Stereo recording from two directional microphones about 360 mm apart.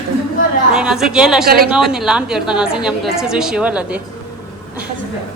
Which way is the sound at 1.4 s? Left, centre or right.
Right.